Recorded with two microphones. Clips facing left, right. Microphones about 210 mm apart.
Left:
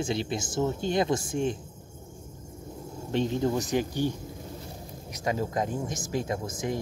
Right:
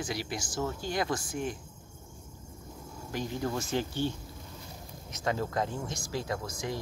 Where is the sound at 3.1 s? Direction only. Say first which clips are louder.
Left 7 dB; 25° left (ahead or behind).